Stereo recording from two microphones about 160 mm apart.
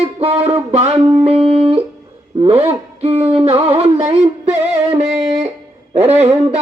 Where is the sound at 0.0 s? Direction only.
40° right (ahead or behind).